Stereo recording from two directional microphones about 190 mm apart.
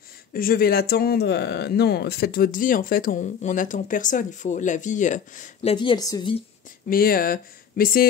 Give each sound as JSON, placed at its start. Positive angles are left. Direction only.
{"t": 0.3, "sound": "speech", "side_deg": 50}
{"t": 6.9, "sound": "speech", "side_deg": 50}